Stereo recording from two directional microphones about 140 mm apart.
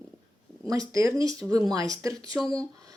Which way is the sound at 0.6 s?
25° right (ahead or behind).